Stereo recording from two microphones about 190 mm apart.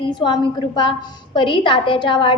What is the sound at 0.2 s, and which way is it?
A woman's voice, 25° left (ahead or behind).